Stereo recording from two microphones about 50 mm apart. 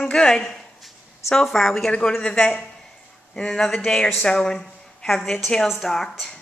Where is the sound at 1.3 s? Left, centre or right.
Centre.